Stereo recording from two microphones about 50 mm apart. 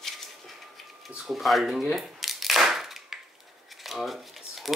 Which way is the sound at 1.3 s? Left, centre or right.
Centre.